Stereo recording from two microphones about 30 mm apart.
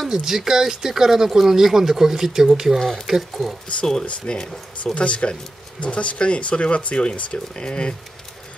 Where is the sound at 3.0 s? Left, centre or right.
Centre.